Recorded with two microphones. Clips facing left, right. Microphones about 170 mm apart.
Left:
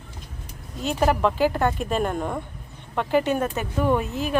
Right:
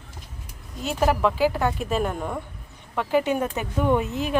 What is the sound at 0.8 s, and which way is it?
Speech, 5° right (ahead or behind).